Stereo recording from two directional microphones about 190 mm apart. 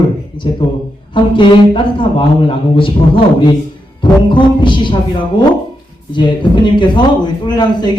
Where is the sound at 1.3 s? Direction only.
25° left (ahead or behind).